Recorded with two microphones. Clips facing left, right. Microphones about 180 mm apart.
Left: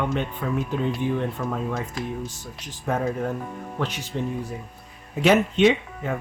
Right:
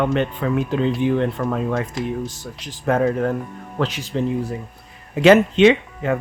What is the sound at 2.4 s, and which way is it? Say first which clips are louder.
Speech: right 7 dB; 90° right.